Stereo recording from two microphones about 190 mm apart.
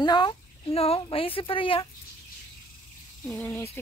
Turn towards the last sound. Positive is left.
turn(degrees=10)  # may be behind; listen again after turning